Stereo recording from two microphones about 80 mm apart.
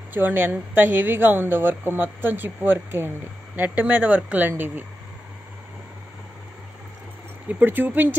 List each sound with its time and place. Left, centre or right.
0.1 s a woman's voice: right
7.4 s a woman's voice: right